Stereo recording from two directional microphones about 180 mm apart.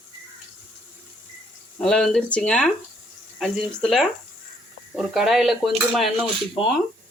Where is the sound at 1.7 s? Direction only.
5° left (ahead or behind).